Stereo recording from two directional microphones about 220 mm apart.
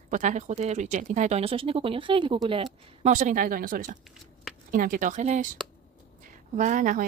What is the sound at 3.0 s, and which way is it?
Speech, 35° right (ahead or behind).